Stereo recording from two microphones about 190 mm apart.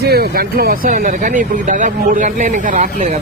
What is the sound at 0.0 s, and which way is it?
Speech, 55° right (ahead or behind).